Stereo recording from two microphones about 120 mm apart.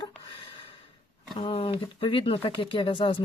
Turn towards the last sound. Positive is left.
turn(degrees=45)  # may be behind; listen again after turning